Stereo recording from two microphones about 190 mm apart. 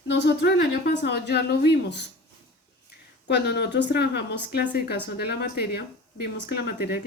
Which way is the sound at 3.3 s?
60° left (ahead or behind).